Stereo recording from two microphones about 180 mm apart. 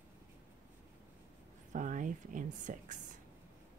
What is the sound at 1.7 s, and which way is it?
Speech, 45° right (ahead or behind).